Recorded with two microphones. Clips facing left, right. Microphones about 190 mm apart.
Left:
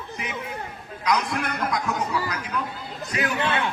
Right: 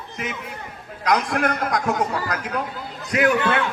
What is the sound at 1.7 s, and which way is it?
Speech, 45° right (ahead or behind).